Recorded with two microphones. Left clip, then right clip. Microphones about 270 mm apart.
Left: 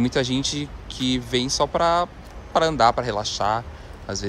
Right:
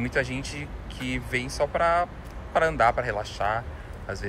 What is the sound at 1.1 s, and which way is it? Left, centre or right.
Speech, left.